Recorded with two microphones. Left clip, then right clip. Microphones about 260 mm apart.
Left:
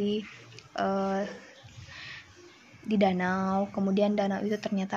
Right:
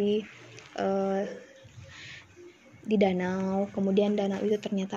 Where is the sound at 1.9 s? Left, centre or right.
Left.